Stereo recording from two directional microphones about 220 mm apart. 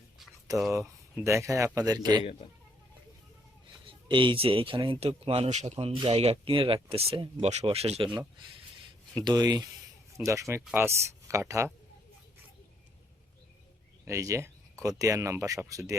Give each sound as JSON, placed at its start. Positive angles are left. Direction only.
{"t": 0.7, "sound": "speech", "side_deg": -10}
{"t": 3.8, "sound": "speech", "side_deg": -20}
{"t": 14.0, "sound": "speech", "side_deg": -15}